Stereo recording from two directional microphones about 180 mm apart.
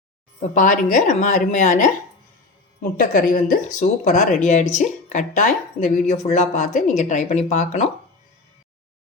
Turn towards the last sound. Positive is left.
turn(degrees=40)  # may be behind; listen again after turning